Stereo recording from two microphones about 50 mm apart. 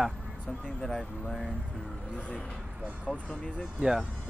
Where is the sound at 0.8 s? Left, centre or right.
Centre.